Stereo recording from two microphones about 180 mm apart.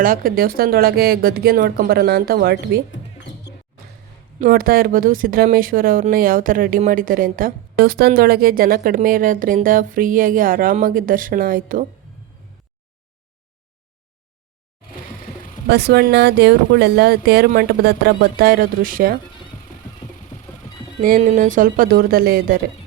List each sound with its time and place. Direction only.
0.0 s speech: 55° right (ahead or behind)
4.4 s speech: 50° right (ahead or behind)
15.6 s speech: 65° right (ahead or behind)
21.2 s speech: 45° right (ahead or behind)